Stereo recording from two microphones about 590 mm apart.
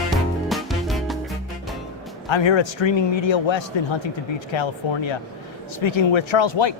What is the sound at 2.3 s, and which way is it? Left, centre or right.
Speech, left.